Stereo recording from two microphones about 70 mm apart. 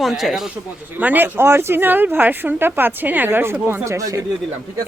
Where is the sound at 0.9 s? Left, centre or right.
Right.